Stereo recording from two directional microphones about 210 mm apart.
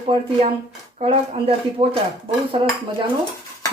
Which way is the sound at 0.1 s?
25° right (ahead or behind).